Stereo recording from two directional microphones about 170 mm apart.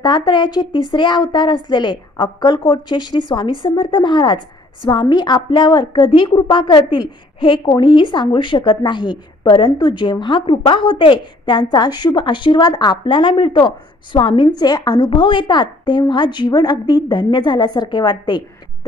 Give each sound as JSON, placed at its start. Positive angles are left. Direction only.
{"t": 0.0, "sound": "a woman's voice", "side_deg": 25}